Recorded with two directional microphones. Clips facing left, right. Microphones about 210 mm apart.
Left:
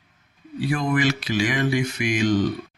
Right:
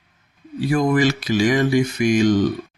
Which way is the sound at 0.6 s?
45° right (ahead or behind).